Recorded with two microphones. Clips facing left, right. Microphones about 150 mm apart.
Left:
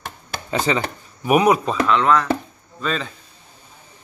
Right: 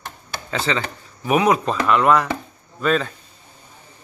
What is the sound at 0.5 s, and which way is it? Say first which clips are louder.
Speech: left 3 dB; 15° left (ahead or behind).